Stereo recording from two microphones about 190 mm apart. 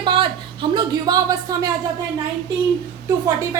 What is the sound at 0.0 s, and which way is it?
Speech, 25° right (ahead or behind).